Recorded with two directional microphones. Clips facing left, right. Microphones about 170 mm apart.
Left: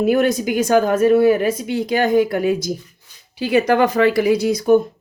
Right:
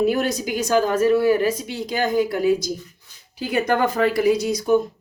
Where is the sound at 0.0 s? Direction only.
55° left (ahead or behind).